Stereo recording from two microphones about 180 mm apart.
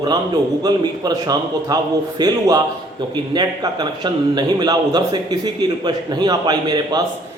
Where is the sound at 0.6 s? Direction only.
20° right (ahead or behind).